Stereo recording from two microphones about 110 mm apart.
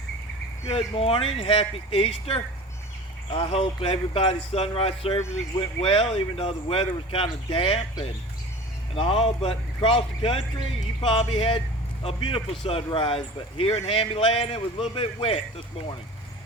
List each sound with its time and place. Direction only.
0.7 s speech: 65° left (ahead or behind)
9.0 s speech: 60° left (ahead or behind)